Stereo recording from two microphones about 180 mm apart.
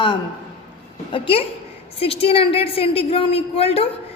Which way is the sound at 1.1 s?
30° left (ahead or behind).